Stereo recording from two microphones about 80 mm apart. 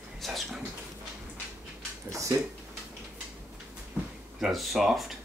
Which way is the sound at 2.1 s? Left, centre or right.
Right.